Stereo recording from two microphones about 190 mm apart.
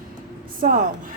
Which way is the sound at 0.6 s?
45° right (ahead or behind).